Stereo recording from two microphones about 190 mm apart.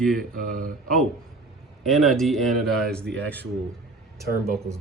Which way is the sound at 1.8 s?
Centre (ahead or behind).